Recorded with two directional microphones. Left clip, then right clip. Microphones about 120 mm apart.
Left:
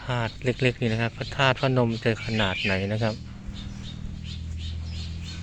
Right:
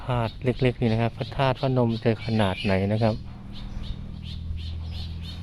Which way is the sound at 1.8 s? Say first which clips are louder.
Right 1 dB; 45° right (ahead or behind).